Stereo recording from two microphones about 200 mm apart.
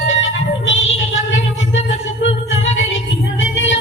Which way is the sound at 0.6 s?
35° left (ahead or behind).